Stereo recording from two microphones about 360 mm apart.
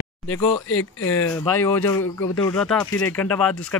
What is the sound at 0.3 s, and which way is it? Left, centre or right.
Speech, left.